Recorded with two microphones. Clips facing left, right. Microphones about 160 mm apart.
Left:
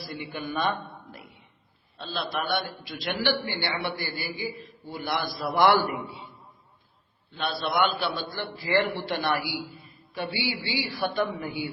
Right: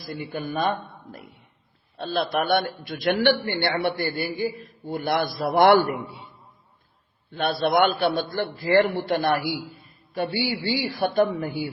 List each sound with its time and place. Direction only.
0.2 s a man's voice: 45° right (ahead or behind)
2.0 s a man's voice: 55° right (ahead or behind)